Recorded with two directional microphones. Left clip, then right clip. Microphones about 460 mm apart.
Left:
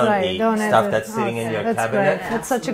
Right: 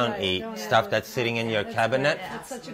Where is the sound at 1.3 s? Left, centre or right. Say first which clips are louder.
Left 4 dB; right.